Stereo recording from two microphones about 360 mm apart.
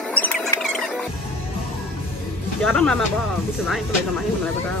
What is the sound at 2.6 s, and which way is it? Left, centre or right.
Speech, centre.